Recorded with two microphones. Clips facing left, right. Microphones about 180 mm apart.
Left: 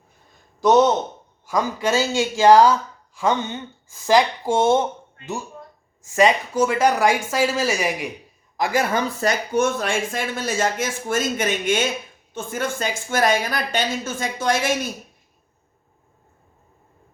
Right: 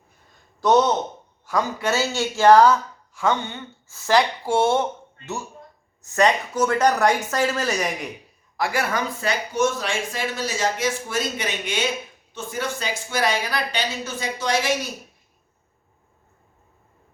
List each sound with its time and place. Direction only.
1.8 s speech: 15° left (ahead or behind)
6.0 s speech: 10° left (ahead or behind)
8.5 s speech: 20° left (ahead or behind)
9.2 s speech: 55° left (ahead or behind)